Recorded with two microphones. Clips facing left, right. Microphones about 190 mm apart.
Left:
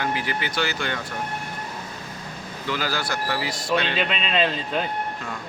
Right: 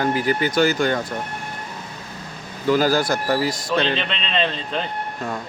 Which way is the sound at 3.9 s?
5° left (ahead or behind).